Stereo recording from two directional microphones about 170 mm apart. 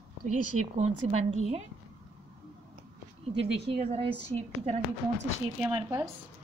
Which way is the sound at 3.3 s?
35° right (ahead or behind).